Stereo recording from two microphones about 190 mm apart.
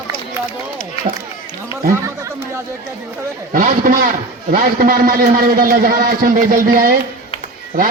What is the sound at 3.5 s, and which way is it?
A man's voice, 45° right (ahead or behind).